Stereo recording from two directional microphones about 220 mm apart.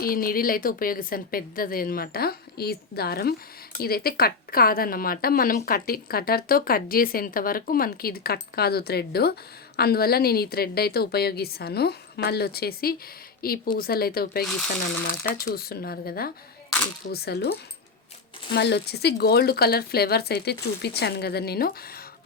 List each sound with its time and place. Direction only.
0.0 s a woman's voice: 40° left (ahead or behind)
14.4 s speech: 5° left (ahead or behind)
15.4 s a woman's voice: 45° left (ahead or behind)
18.5 s a woman's voice: 50° left (ahead or behind)